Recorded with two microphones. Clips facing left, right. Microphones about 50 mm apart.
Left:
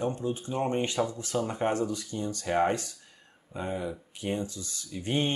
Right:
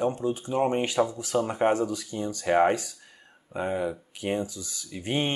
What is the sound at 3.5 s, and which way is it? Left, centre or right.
Speech, right.